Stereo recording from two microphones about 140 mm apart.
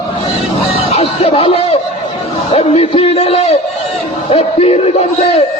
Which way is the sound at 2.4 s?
45° left (ahead or behind).